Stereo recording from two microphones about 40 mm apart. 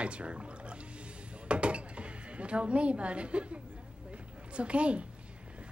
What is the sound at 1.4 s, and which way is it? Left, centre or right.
Dishes, right.